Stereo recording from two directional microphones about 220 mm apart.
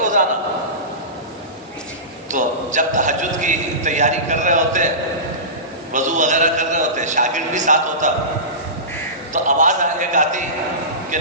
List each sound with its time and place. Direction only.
0.0 s a sound: 35° right (ahead or behind)
2.3 s a man's voice: 35° right (ahead or behind)
5.9 s a man's voice: 35° right (ahead or behind)
9.3 s a man's voice: 35° right (ahead or behind)